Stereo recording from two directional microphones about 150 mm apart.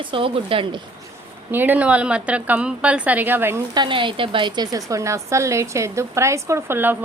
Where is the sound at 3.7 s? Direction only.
30° right (ahead or behind); by 7.0 s 15° right (ahead or behind).